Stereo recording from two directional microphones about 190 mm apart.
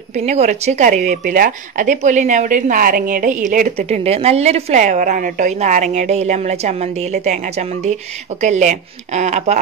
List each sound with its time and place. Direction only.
0.1 s speech: 35° right (ahead or behind)